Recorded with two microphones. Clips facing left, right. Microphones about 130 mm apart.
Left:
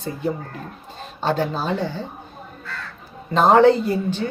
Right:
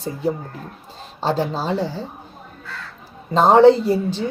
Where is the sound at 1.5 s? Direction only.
35° right (ahead or behind).